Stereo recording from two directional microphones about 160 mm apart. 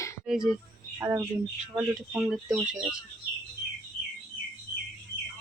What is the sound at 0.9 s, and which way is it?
Speech, 15° right (ahead or behind).